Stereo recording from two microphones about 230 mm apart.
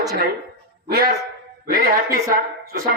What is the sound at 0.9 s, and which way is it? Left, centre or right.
Speech, right.